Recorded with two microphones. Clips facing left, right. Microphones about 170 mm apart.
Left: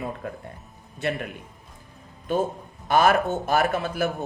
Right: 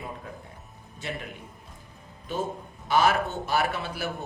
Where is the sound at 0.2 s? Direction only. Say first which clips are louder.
Left 7 dB; 60° left (ahead or behind).